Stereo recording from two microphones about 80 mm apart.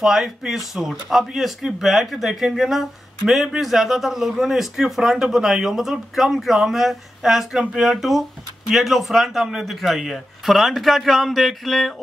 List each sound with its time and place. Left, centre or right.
0.0 s a man's voice: centre